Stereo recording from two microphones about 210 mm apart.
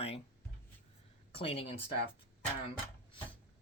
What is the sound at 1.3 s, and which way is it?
Speech, 25° left (ahead or behind).